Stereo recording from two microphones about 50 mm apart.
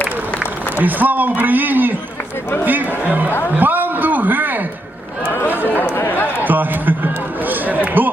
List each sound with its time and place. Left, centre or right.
0.8 s a man's voice: right
5.7 s a sound: left
6.4 s run: right